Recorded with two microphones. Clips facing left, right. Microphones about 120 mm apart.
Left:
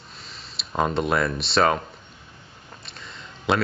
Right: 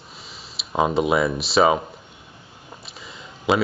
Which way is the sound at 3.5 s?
5° right (ahead or behind).